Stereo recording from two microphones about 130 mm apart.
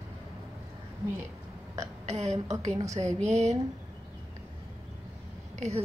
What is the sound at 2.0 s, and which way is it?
A woman's voice, 60° right (ahead or behind).